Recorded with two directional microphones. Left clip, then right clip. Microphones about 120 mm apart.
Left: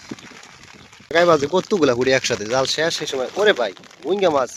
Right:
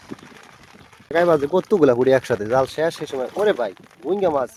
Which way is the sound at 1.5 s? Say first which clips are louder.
Right 1 dB; 30° right (ahead or behind).